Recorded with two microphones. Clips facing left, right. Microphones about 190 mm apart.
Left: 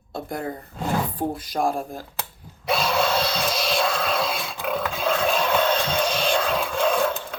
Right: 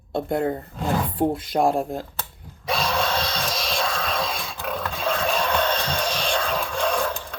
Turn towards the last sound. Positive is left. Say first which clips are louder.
# left 2 dB
turn(degrees=5)  # may be behind; listen again after turning